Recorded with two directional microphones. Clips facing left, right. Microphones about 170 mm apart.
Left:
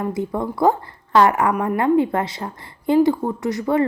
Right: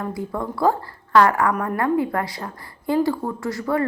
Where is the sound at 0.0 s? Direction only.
20° left (ahead or behind).